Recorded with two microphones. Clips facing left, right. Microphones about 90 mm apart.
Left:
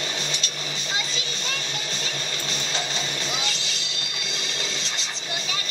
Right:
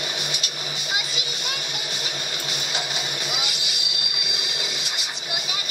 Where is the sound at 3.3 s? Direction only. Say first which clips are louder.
Even; 15° right (ahead or behind).